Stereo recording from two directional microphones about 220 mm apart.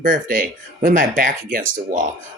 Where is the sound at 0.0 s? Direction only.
40° right (ahead or behind).